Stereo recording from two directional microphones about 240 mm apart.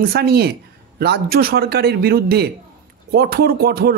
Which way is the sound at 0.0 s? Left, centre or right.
Right.